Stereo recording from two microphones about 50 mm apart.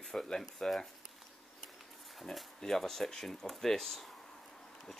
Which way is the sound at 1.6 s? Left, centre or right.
Centre.